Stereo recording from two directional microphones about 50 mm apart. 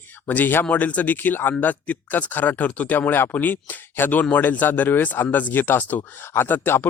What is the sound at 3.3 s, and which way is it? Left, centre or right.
Speech, left.